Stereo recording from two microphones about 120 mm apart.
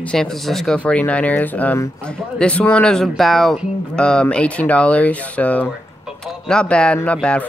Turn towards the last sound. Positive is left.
turn(degrees=10)  # may be behind; listen again after turning